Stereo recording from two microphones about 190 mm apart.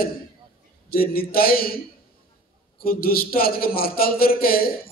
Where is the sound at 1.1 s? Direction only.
50° left (ahead or behind).